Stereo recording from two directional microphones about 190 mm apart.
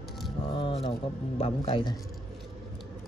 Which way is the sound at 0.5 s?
25° left (ahead or behind).